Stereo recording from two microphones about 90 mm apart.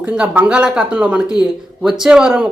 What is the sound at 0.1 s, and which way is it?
Speech, 10° right (ahead or behind).